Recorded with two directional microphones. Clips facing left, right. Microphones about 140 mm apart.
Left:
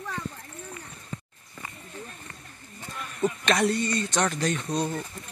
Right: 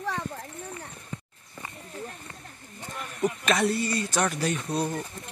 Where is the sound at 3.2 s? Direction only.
5° right (ahead or behind).